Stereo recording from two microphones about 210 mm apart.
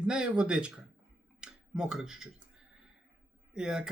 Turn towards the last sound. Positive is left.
turn(degrees=-5)  # may be behind; listen again after turning